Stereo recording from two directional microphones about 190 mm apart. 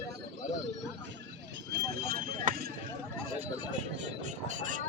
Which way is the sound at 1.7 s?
55° right (ahead or behind).